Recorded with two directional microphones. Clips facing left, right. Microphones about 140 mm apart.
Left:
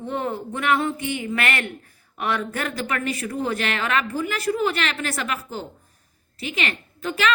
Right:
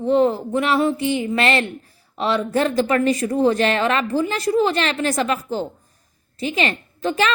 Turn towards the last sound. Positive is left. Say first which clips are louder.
# right 3 dB
turn(degrees=-35)  # may be behind; listen again after turning